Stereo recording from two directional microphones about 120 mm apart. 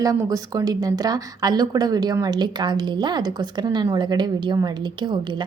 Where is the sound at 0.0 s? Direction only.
30° right (ahead or behind).